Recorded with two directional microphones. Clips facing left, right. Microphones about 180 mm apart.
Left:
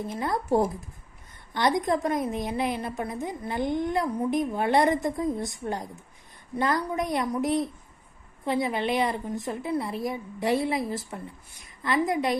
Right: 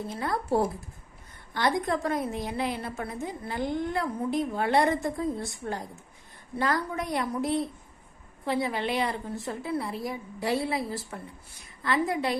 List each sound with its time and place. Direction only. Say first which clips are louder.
0.0 s a woman's voice: left 2 dB; 20° left (ahead or behind)